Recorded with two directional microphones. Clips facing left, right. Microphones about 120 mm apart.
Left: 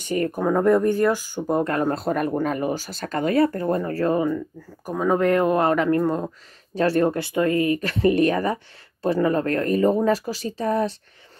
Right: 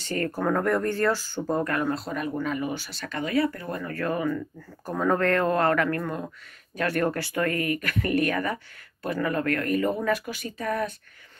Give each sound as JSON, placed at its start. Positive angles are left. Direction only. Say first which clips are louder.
{"t": 0.0, "sound": "speech", "louder": "left 4 dB", "side_deg": 15}
{"t": 1.9, "sound": "speech", "louder": "left 6 dB", "side_deg": 50}
{"t": 4.6, "sound": "speech", "louder": "left 3 dB", "side_deg": 10}